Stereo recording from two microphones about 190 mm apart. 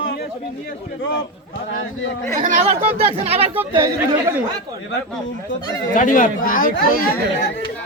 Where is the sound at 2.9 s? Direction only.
30° right (ahead or behind).